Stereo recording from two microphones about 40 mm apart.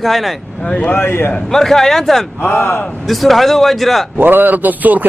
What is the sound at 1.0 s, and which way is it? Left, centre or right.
Speech, left.